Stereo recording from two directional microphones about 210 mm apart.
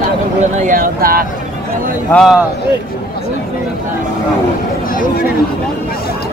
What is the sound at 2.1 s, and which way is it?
Speech, centre (ahead or behind).